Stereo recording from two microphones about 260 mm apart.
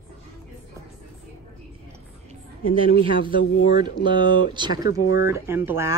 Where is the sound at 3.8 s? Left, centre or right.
Centre.